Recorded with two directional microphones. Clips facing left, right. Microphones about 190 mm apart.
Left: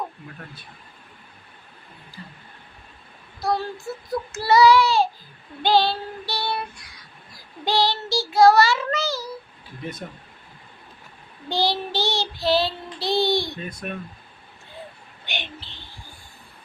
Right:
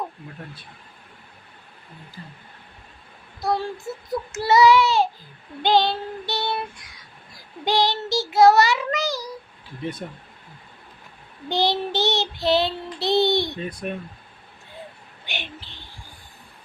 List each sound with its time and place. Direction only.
3.4 s child singing: 20° right (ahead or behind)
11.4 s child singing: 20° right (ahead or behind)
15.3 s a sound: 10° right (ahead or behind)